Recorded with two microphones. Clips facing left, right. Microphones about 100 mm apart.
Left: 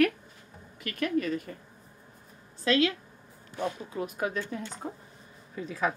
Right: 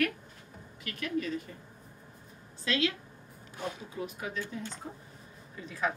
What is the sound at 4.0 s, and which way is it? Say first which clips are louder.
Speech: left 7 dB; 55° left (ahead or behind).